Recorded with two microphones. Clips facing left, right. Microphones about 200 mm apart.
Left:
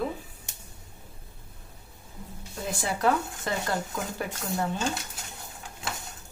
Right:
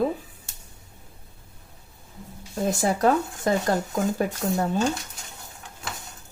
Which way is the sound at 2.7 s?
40° right (ahead or behind).